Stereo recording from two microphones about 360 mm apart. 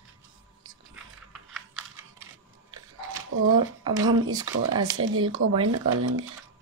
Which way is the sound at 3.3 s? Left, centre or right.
Right.